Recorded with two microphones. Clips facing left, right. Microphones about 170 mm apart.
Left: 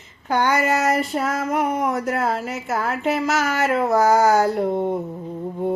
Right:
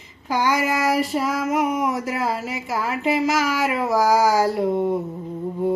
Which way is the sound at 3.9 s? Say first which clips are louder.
Left 1 dB; 60° left (ahead or behind).